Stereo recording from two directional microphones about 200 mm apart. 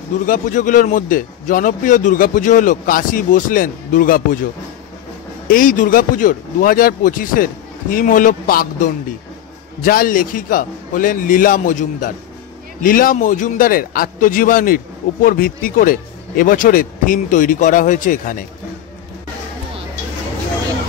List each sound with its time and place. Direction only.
0.3 s speech: 40° left (ahead or behind)
5.5 s a man's voice: 45° left (ahead or behind)
9.8 s a man's voice: 45° left (ahead or behind)